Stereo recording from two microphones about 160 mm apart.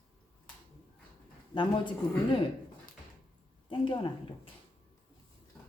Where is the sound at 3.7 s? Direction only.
30° left (ahead or behind).